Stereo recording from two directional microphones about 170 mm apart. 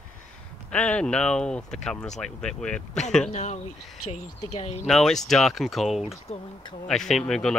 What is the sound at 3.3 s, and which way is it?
Speech, 40° left (ahead or behind).